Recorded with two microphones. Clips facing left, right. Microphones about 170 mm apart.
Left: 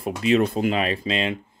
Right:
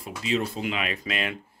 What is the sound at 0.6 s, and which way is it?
Speech, 35° left (ahead or behind).